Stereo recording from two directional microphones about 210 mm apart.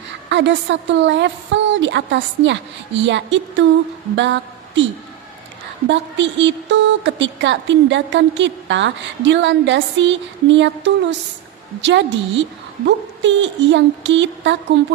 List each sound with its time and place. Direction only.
0.3 s a woman's voice: 60° right (ahead or behind)
5.9 s a woman's voice: 60° right (ahead or behind)